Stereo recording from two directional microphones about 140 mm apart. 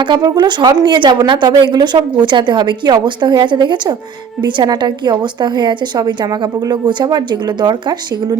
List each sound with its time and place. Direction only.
0.2 s a woman's voice: 30° right (ahead or behind)